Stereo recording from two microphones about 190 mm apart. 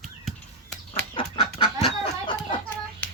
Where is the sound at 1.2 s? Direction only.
25° left (ahead or behind).